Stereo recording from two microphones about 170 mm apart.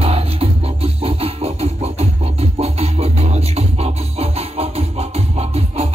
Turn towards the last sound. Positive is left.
turn(degrees=-40)  # may be behind; listen again after turning